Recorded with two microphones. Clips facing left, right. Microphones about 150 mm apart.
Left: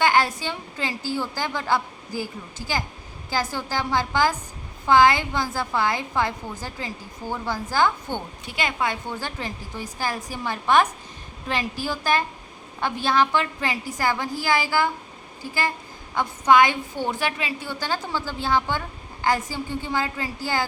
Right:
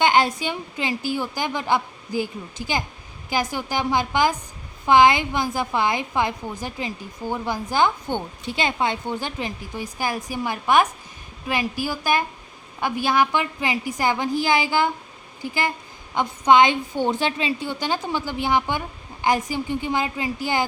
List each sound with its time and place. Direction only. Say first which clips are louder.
0.0 s a woman's voice: right 2 dB; 20° right (ahead or behind)
16.1 s a woman's voice: right 1 dB; 20° right (ahead or behind)